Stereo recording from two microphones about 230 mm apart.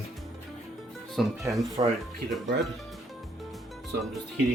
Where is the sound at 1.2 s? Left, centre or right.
Centre.